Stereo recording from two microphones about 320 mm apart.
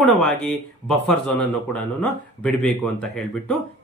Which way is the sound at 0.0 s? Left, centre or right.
Centre.